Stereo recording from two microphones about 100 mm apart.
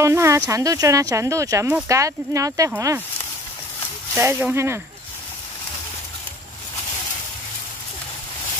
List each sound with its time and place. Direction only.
0.0 s speech: 30° right (ahead or behind)
4.2 s speech: 20° right (ahead or behind)